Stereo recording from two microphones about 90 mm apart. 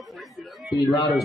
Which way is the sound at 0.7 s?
55° left (ahead or behind).